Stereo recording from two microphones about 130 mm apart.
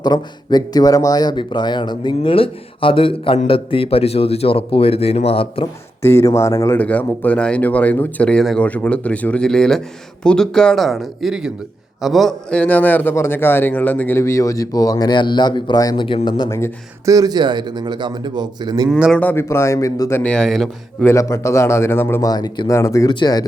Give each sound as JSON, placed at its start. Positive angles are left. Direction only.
{"t": 0.0, "sound": "speech", "side_deg": 30}
{"t": 6.0, "sound": "a man's voice", "side_deg": 20}
{"t": 6.7, "sound": "a man's voice", "side_deg": 10}
{"t": 16.5, "sound": "a man's voice", "side_deg": 20}
{"t": 17.1, "sound": "a man's voice", "side_deg": -30}
{"t": 18.9, "sound": "a man's voice", "side_deg": -5}
{"t": 19.1, "sound": "a man's voice", "side_deg": 15}
{"t": 20.2, "sound": "speech", "side_deg": 5}
{"t": 21.0, "sound": "a man's voice", "side_deg": 20}
{"t": 22.3, "sound": "a man's voice", "side_deg": 30}